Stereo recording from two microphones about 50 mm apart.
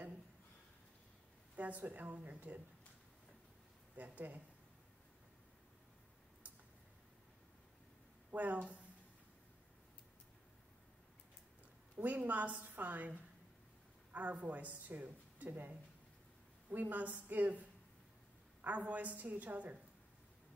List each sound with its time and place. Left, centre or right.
1.8 s a woman's voice: right
3.9 s a woman's voice: right
8.3 s speech: right
12.0 s a woman's voice: right
16.7 s a woman's voice: right
18.6 s a woman's voice: right